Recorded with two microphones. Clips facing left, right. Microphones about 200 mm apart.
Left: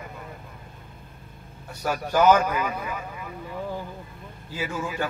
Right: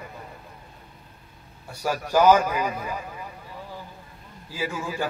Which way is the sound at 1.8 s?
10° right (ahead or behind).